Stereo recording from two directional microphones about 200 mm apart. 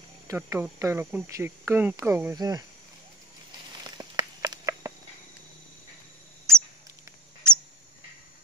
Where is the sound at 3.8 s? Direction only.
20° right (ahead or behind).